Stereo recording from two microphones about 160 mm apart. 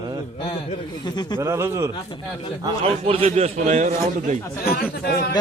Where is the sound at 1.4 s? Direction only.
15° right (ahead or behind).